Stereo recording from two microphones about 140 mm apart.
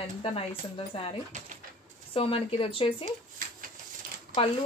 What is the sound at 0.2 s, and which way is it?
Speech, 40° left (ahead or behind).